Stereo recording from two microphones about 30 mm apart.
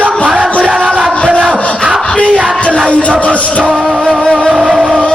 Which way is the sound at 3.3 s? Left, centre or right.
Left.